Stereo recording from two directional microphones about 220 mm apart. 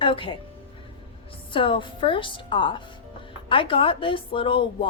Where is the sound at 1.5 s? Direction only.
25° left (ahead or behind).